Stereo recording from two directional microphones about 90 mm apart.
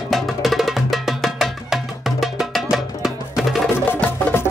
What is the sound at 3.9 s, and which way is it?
Music, 25° left (ahead or behind).